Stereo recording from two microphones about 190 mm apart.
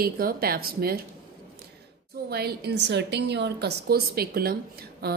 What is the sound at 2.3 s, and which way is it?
Speech, 55° right (ahead or behind).